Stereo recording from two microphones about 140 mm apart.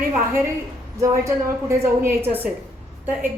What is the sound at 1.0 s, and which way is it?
A woman's voice, 20° right (ahead or behind).